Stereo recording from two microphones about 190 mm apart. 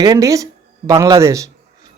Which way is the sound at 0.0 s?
20° right (ahead or behind).